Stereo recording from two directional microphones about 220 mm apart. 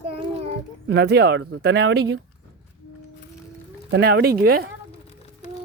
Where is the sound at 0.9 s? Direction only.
45° right (ahead or behind).